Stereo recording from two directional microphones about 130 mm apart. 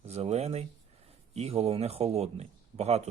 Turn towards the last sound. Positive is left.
turn(degrees=-55)  # may be behind; listen again after turning